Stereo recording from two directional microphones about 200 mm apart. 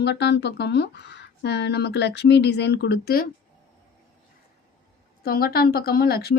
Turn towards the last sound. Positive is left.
turn(degrees=50)  # may be behind; listen again after turning